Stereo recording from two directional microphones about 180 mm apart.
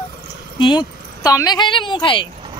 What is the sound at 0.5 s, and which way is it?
Speech, 25° left (ahead or behind).